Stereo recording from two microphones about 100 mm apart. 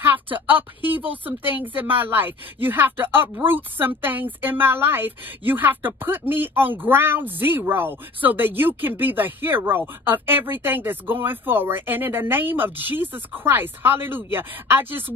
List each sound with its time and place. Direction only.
0.0 s speech: 20° right (ahead or behind)